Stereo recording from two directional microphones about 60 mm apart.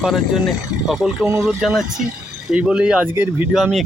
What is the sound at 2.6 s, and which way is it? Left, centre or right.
Speech, centre.